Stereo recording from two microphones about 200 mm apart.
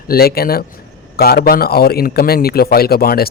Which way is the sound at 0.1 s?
50° left (ahead or behind).